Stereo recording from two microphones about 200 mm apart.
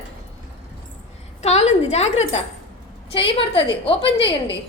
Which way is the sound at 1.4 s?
35° left (ahead or behind).